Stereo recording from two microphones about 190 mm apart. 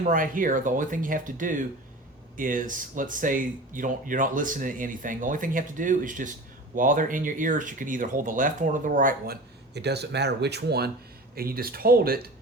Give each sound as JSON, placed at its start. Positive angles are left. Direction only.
{"t": 0.0, "sound": "speech", "side_deg": -45}